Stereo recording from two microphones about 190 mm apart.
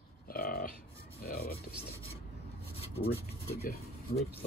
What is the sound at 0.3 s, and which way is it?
Grunt, 50° left (ahead or behind).